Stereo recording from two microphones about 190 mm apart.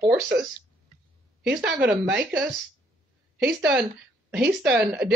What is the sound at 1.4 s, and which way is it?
Speech, 5° right (ahead or behind).